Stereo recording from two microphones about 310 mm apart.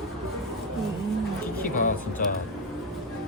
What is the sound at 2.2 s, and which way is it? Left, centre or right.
Speech, left.